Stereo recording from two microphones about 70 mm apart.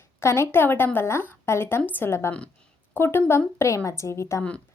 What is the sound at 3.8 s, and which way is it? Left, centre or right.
Speech, left.